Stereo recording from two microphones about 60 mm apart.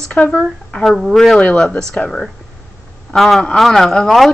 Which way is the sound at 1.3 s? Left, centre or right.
Centre.